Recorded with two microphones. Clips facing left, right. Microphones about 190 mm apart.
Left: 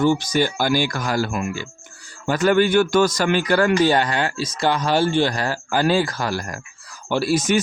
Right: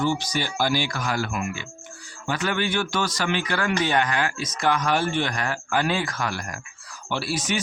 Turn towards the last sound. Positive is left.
turn(degrees=45)  # may be behind; listen again after turning